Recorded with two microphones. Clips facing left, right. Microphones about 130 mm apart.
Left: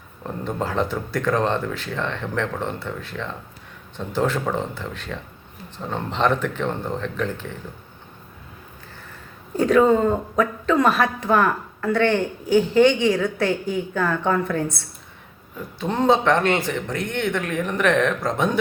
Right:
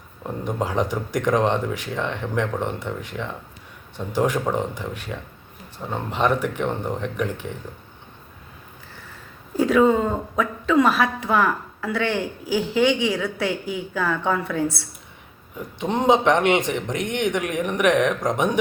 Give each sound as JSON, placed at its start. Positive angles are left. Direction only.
{"t": 0.2, "sound": "speech", "side_deg": -15}
{"t": 9.6, "sound": "a woman's voice", "side_deg": -5}
{"t": 15.5, "sound": "speech", "side_deg": -15}